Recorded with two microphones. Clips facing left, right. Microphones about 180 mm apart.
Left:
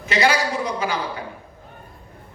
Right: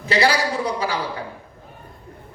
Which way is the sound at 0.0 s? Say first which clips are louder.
Right 1 dB; 35° right (ahead or behind).